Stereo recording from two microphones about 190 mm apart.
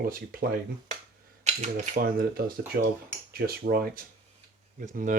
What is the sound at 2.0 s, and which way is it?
Speech, 50° right (ahead or behind).